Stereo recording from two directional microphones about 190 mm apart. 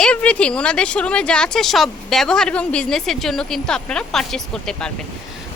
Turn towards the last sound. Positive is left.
turn(degrees=5)  # may be behind; listen again after turning